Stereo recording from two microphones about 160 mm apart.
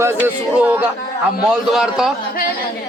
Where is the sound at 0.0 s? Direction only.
10° right (ahead or behind).